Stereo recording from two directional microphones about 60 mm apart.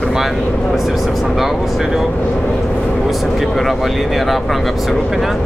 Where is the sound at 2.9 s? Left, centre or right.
Centre.